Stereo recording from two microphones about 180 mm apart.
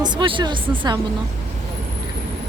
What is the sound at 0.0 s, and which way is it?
Speech, 25° right (ahead or behind).